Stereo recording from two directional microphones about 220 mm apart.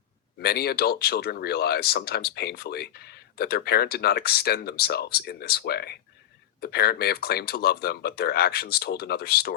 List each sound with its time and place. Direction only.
0.4 s speech: 45° left (ahead or behind)